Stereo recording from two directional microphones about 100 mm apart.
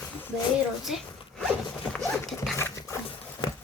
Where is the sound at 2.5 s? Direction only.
30° left (ahead or behind).